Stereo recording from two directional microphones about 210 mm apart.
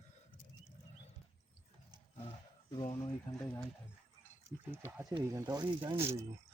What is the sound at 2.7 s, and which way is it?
Speech, 25° left (ahead or behind).